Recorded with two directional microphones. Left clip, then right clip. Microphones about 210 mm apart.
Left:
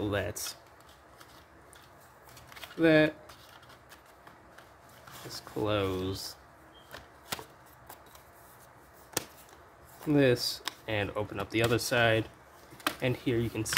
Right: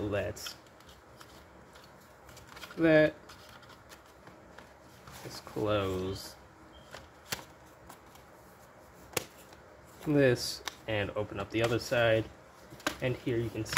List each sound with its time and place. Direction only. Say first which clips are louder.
0.1 s speech: left 1 dB; 20° left (ahead or behind)
2.8 s speech: even; 10° left (ahead or behind)
5.3 s speech: even; 10° left (ahead or behind)
10.0 s speech: left 1 dB; 5° left (ahead or behind); by 13.7 s 25° left (ahead or behind)